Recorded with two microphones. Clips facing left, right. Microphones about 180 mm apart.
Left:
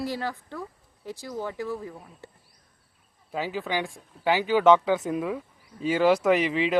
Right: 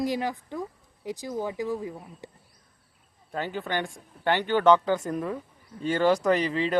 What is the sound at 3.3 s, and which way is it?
Speech, centre (ahead or behind).